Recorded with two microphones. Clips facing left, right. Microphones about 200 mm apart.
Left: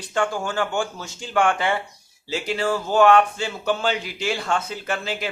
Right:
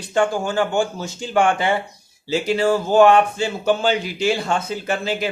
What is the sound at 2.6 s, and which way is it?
Speech, 30° right (ahead or behind).